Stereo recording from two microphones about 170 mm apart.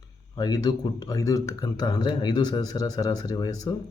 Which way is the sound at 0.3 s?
25° left (ahead or behind).